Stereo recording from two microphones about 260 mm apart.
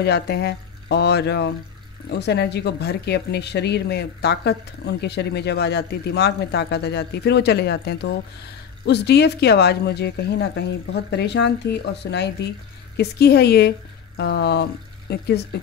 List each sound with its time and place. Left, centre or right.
0.0 s speech: left